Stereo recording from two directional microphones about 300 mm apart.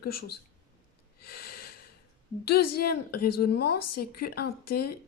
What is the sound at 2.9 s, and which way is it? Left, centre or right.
Speech, left.